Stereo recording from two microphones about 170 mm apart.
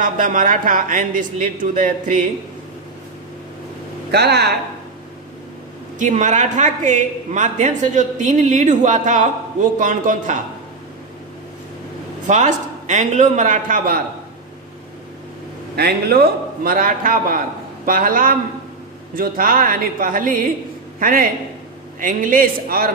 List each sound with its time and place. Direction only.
0.0 s a man's voice: 50° right (ahead or behind)
4.1 s speech: 75° right (ahead or behind)
5.9 s a man's voice: 45° right (ahead or behind)
12.3 s a man's voice: 45° right (ahead or behind)
15.7 s a man's voice: 70° right (ahead or behind)